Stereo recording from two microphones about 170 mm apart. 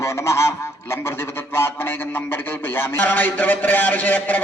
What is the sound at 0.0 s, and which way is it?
Goose, 15° left (ahead or behind).